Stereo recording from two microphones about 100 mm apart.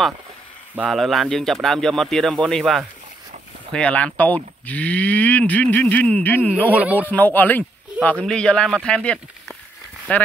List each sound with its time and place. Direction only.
0.8 s speech: centre (ahead or behind)
3.7 s speech: 10° left (ahead or behind)
6.7 s speech: 15° right (ahead or behind)
7.0 s speech: 15° left (ahead or behind)